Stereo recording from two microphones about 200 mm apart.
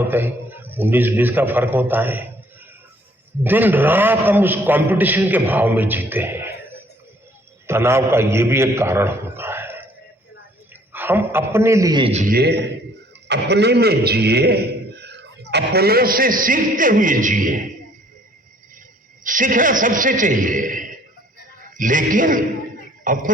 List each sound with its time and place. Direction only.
0.0 s a man's voice: 10° right (ahead or behind)
3.4 s a man's voice: 10° right (ahead or behind)
10.9 s a man's voice: 10° right (ahead or behind); by 12.3 s 30° right (ahead or behind)
12.3 s a man's voice: 55° right (ahead or behind)
19.2 s a man's voice: 40° right (ahead or behind)